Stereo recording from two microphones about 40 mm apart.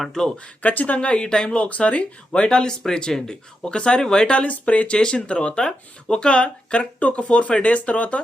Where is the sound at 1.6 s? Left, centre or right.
Left.